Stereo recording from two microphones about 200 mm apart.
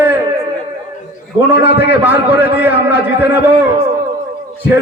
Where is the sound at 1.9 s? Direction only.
10° right (ahead or behind).